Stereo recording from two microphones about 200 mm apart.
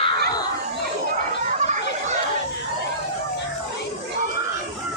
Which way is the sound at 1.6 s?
35° right (ahead or behind).